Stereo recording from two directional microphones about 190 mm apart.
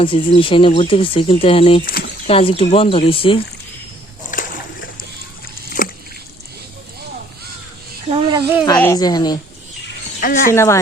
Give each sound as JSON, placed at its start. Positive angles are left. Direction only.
{"t": 0.0, "sound": "speech", "side_deg": 30}
{"t": 1.8, "sound": "speech", "side_deg": 50}
{"t": 2.2, "sound": "speech", "side_deg": 30}
{"t": 4.3, "sound": "splash", "side_deg": 45}
{"t": 5.8, "sound": "a sound", "side_deg": 45}
{"t": 8.0, "sound": "a sound", "side_deg": -30}
{"t": 8.8, "sound": "speech", "side_deg": 15}
{"t": 10.2, "sound": "speech", "side_deg": 45}
{"t": 10.5, "sound": "speech", "side_deg": 15}